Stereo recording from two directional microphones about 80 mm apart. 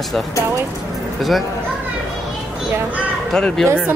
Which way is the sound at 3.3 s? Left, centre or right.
Centre.